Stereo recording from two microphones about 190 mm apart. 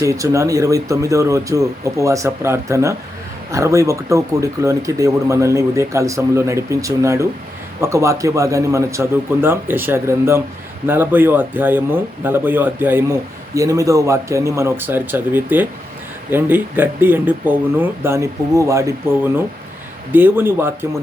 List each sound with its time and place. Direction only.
0.0 s speech: 15° right (ahead or behind)